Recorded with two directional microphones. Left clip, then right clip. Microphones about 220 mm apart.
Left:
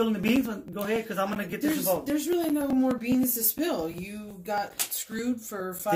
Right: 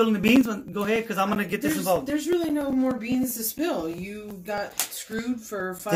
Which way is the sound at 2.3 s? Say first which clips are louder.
Right 1 dB; 45° left (ahead or behind).